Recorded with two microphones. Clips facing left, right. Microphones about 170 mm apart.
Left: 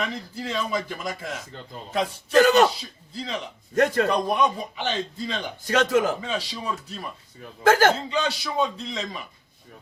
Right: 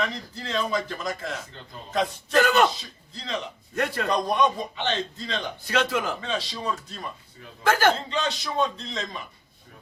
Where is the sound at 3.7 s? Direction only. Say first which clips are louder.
Left 7 dB; 40° left (ahead or behind).